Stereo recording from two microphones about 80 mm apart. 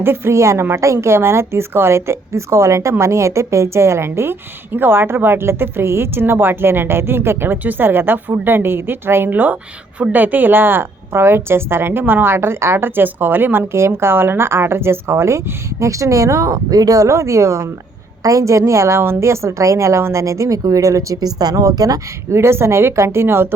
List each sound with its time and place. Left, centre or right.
0.0 s a woman's voice: right
22.3 s a woman's voice: right